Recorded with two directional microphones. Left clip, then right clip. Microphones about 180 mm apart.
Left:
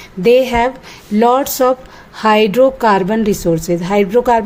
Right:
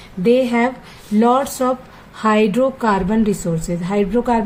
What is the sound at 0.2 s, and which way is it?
Speech, 50° left (ahead or behind).